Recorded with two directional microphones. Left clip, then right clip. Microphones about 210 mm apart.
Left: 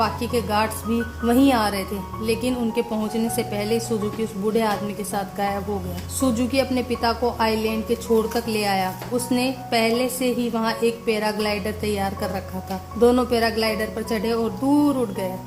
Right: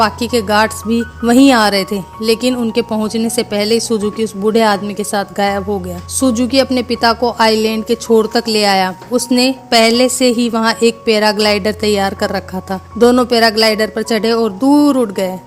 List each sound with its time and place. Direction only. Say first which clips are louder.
0.0 s a woman's voice: right 9 dB; 35° right (ahead or behind)